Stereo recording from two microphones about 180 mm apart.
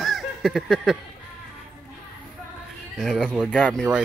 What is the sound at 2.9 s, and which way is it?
Speech, centre (ahead or behind).